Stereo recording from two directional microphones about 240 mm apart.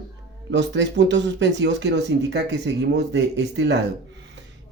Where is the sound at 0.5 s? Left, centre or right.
Right.